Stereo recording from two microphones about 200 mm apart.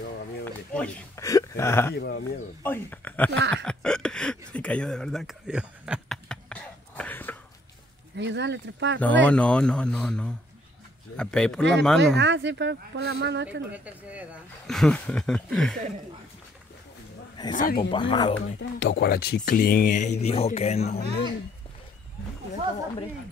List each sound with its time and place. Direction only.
0.5 s a sound: 5° left (ahead or behind)
2.0 s speech: 55° left (ahead or behind)
2.6 s speech: 10° left (ahead or behind)
3.3 s speech: 65° right (ahead or behind)
3.6 s a sound: 5° left (ahead or behind)
8.2 s speech: 60° right (ahead or behind)
9.0 s speech: 5° left (ahead or behind)
12.2 s speech: 65° right (ahead or behind)
13.7 s speech: 5° right (ahead or behind)
14.7 s speech: 5° left (ahead or behind)
17.6 s speech: 45° left (ahead or behind)
17.9 s speech: 25° left (ahead or behind)
18.6 s speech: 55° left (ahead or behind); by 21.0 s 30° left (ahead or behind)